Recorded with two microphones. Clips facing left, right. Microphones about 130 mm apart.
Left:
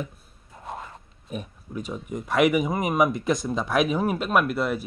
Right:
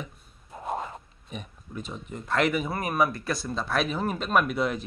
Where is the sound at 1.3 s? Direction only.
5° left (ahead or behind).